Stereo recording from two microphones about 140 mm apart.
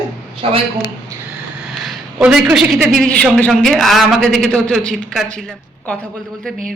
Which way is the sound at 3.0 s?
5° left (ahead or behind).